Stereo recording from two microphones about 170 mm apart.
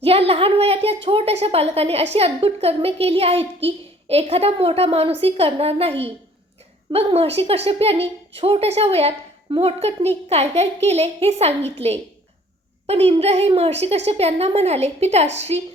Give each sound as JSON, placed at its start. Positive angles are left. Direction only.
{"t": 0.0, "sound": "speech", "side_deg": -35}
{"t": 6.9, "sound": "speech", "side_deg": -35}
{"t": 12.9, "sound": "speech", "side_deg": -40}